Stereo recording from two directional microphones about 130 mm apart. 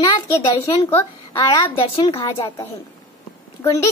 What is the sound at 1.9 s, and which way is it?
Speech, 45° left (ahead or behind).